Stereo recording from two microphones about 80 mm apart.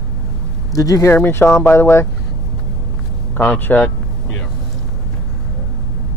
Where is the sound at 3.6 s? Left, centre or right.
Left.